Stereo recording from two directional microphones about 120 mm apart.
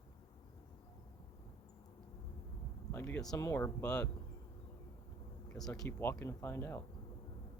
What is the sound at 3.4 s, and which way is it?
Speech, 25° left (ahead or behind).